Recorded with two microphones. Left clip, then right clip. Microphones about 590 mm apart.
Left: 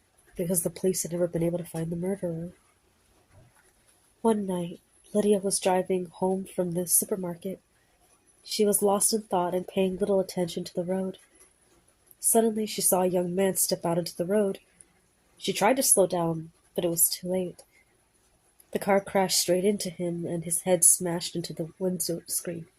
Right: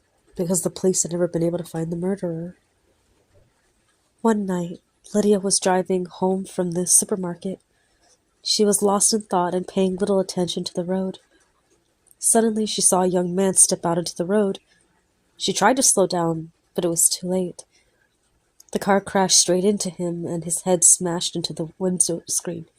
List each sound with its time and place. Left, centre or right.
0.3 s a woman's voice: centre
4.2 s a woman's voice: centre
12.3 s a woman's voice: centre
18.7 s a woman's voice: centre